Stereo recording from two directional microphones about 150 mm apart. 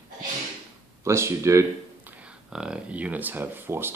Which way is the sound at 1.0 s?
20° right (ahead or behind).